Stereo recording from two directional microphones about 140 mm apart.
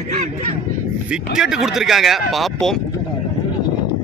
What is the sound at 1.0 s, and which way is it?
A man's voice, 5° right (ahead or behind).